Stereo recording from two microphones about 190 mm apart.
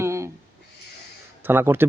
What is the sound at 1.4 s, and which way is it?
Speech, 10° right (ahead or behind).